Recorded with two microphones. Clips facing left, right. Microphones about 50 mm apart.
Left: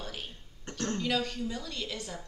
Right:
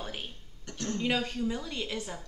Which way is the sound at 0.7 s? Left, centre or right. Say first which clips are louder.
Left 2 dB; left.